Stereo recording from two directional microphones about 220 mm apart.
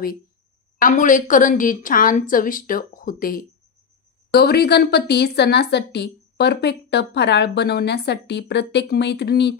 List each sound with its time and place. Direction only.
0.7 s a woman's voice: 35° left (ahead or behind)